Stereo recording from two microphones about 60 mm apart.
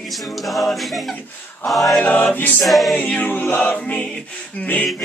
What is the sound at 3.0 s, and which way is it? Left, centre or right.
Music, left.